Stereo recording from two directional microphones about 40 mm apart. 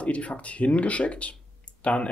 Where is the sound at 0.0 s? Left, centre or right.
Left.